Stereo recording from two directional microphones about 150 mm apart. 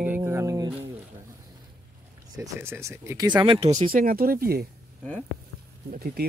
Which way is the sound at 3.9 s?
70° right (ahead or behind).